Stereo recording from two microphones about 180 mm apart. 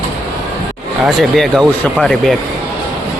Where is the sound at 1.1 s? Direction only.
Centre (ahead or behind).